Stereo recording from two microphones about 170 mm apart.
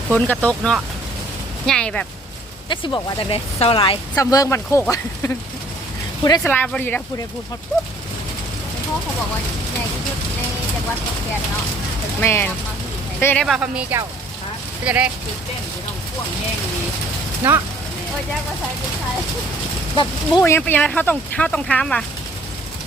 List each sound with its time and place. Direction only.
0.1 s speech: 10° left (ahead or behind)
2.6 s speech: 30° left (ahead or behind)
4.1 s speech: 20° left (ahead or behind)
6.5 s speech: 10° left (ahead or behind)
12.2 s speech: 15° left (ahead or behind); by 15.1 s 5° right (ahead or behind)
17.4 s speech: 10° right (ahead or behind)
20.4 s speech: 10° left (ahead or behind)